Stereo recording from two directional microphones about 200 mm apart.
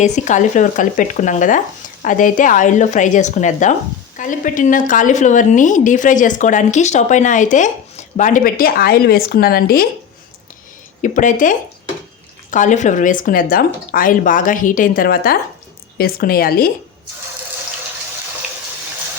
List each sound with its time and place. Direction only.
0.0 s a woman's voice: 40° left (ahead or behind)
11.0 s a woman's voice: 40° left (ahead or behind)